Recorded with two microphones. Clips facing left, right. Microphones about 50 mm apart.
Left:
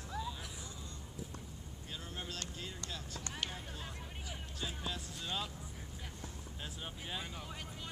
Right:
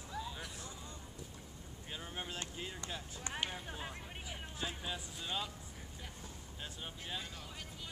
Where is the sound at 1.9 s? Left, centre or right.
Right.